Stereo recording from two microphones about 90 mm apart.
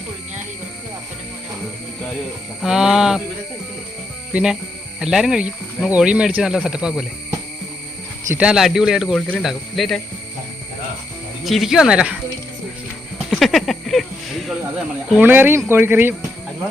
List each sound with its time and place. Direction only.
2.6 s speech: 5° right (ahead or behind)
4.3 s speech: 10° right (ahead or behind)
8.4 s speech: 5° right (ahead or behind)
9.1 s speech: 15° left (ahead or behind)
9.4 s speech: centre (ahead or behind)
11.4 s speech: centre (ahead or behind)
13.3 s a sound: centre (ahead or behind)
15.2 s speech: 20° right (ahead or behind)